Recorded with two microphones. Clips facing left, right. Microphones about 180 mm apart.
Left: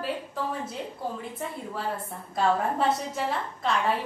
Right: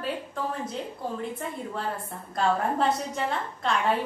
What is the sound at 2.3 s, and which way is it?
A woman's voice, centre (ahead or behind).